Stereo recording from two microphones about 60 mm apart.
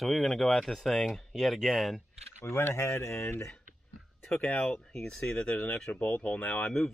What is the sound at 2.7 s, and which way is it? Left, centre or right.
Speech, left.